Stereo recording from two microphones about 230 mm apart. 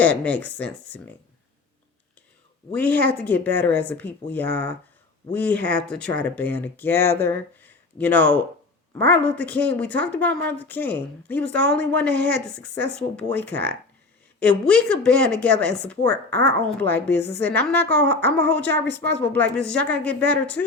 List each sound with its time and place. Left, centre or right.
0.0 s speech: centre
2.8 s a woman's voice: right
3.2 s a woman's voice: centre
13.1 s a woman's voice: centre